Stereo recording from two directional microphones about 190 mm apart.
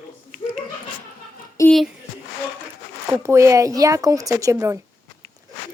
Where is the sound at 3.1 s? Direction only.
15° right (ahead or behind).